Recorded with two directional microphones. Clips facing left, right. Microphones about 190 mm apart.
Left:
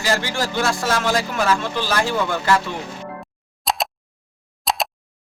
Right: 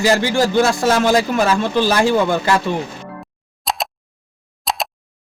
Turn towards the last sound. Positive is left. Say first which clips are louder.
# even
turn(degrees=0)  # may be behind; listen again after turning